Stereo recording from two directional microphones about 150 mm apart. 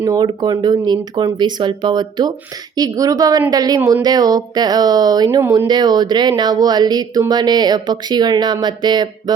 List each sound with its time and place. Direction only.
0.0 s speech: 25° right (ahead or behind)